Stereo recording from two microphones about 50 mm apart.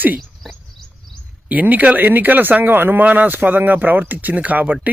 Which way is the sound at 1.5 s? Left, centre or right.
Right.